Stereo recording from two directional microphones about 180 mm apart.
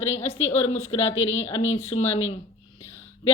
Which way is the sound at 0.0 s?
35° left (ahead or behind).